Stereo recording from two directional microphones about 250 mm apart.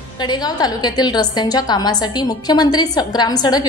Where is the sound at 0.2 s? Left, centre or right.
Centre.